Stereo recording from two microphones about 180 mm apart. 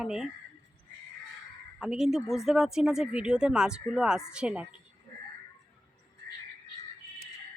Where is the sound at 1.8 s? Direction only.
5° right (ahead or behind).